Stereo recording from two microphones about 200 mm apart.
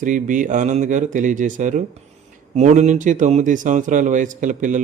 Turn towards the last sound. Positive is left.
turn(degrees=-40)  # may be behind; listen again after turning